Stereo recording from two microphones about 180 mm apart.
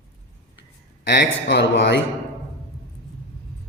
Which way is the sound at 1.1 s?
70° left (ahead or behind).